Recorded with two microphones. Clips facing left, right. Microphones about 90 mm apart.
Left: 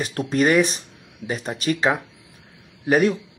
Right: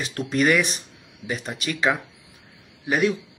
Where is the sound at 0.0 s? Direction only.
40° left (ahead or behind).